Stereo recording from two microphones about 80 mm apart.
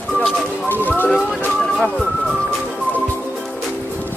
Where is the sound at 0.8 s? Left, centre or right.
Left.